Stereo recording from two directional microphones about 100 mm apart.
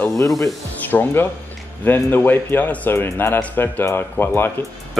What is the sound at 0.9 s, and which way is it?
A man's voice, 10° left (ahead or behind).